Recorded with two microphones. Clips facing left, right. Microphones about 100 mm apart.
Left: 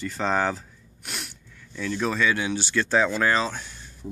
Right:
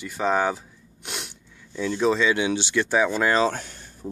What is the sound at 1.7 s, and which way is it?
Speech, 20° right (ahead or behind).